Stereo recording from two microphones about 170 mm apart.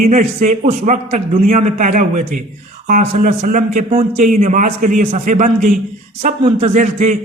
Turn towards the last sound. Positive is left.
turn(degrees=-45)  # may be behind; listen again after turning